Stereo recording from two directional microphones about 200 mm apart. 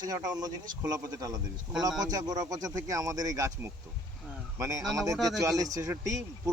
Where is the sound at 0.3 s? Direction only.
20° right (ahead or behind).